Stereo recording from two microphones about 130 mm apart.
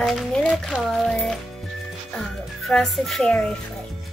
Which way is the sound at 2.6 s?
Centre (ahead or behind).